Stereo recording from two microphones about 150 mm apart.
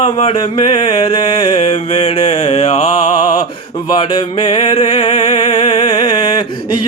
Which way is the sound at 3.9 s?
30° left (ahead or behind).